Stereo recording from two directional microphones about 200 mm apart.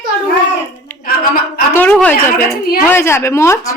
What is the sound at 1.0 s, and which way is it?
Speech, 45° left (ahead or behind).